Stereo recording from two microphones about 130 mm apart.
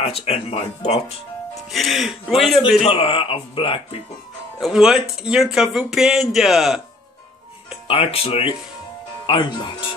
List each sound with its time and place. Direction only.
0.0 s speech: 50° left (ahead or behind)
1.5 s speech: centre (ahead or behind)
2.8 s speech: 45° left (ahead or behind)
4.6 s speech: centre (ahead or behind)
7.9 s speech: 50° left (ahead or behind)
9.2 s speech: 40° left (ahead or behind)